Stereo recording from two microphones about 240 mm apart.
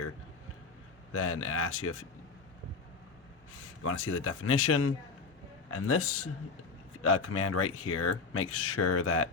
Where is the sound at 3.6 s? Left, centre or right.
Left.